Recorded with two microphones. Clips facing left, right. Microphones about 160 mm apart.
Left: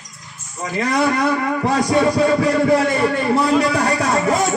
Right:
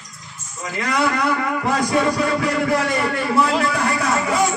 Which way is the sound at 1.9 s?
30° left (ahead or behind).